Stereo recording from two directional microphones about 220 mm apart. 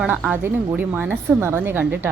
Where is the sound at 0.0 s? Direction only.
5° right (ahead or behind).